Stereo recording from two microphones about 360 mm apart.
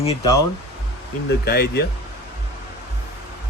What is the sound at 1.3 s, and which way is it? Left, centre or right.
Speech, left.